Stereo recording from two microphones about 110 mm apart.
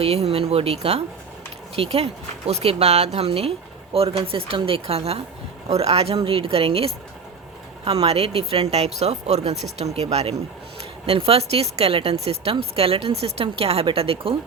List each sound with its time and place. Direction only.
0.0 s speech: 65° right (ahead or behind)
10.8 s speech: 65° right (ahead or behind)